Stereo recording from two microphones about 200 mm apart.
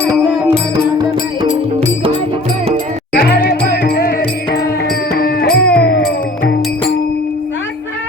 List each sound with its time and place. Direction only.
3.1 s music: 50° left (ahead or behind)
5.1 s music: 55° left (ahead or behind)